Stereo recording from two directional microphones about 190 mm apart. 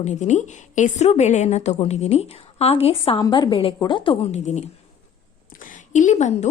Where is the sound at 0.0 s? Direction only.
40° left (ahead or behind).